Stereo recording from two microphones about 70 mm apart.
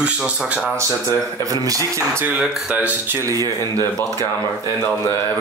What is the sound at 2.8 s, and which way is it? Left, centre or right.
Speech, right.